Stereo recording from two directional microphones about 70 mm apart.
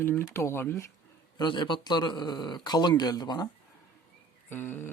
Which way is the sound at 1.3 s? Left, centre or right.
Left.